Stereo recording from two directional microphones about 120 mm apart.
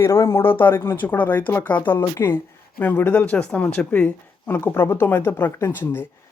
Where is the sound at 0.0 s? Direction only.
20° left (ahead or behind).